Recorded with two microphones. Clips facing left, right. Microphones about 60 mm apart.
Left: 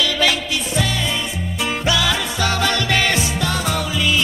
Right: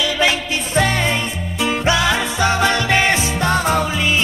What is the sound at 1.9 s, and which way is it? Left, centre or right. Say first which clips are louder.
Music: right 2 dB; right.